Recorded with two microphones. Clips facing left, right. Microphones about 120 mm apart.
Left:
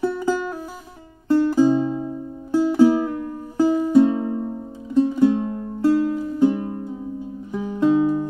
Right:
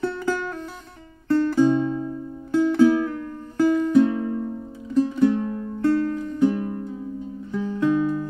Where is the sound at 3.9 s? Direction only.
20° left (ahead or behind).